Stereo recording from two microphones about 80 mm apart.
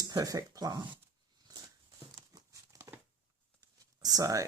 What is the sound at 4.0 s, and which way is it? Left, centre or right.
Speech, right.